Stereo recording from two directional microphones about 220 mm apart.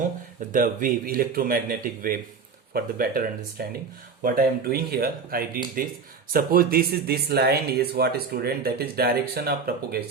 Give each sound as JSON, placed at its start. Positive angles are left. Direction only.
{"t": 0.5, "sound": "speech", "side_deg": -35}